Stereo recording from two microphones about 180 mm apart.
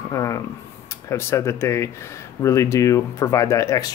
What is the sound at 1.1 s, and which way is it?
Speech, 15° left (ahead or behind).